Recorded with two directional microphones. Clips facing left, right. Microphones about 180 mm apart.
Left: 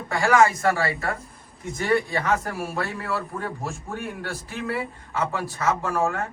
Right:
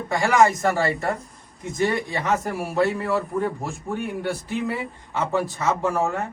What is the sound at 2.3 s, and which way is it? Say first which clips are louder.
A man's voice: right 4 dB; 15° right (ahead or behind).